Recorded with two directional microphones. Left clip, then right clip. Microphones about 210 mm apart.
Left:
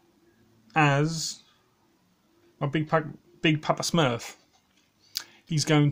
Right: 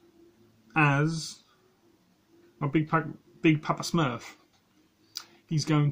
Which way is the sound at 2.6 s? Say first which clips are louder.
Left 1 dB; 45° left (ahead or behind).